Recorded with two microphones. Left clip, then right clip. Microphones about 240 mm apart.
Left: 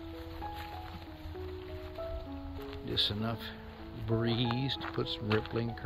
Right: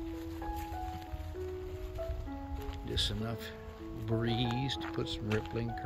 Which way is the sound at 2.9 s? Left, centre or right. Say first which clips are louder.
Left 3 dB; centre.